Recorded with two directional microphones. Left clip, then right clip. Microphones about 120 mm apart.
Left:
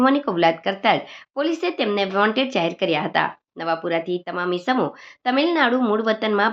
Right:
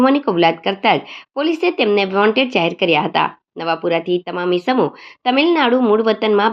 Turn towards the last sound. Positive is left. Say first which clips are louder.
# right 5 dB
turn(degrees=-15)  # may be behind; listen again after turning